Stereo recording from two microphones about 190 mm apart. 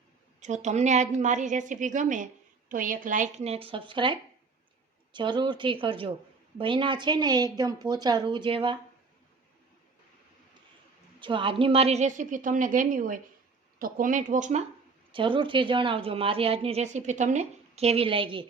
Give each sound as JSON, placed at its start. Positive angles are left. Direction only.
{"t": 0.3, "sound": "a woman's voice", "side_deg": -40}
{"t": 11.2, "sound": "a woman's voice", "side_deg": -25}
{"t": 15.1, "sound": "a woman's voice", "side_deg": -25}